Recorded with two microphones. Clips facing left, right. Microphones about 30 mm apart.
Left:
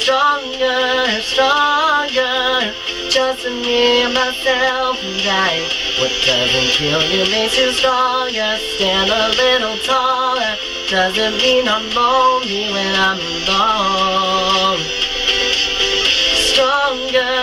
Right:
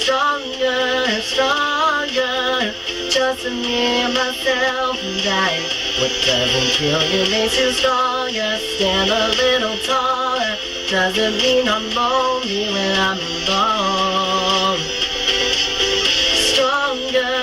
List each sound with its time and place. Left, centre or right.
0.1 s music: left
9.9 s music: left